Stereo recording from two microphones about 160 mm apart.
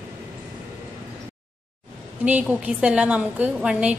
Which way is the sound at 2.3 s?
10° right (ahead or behind).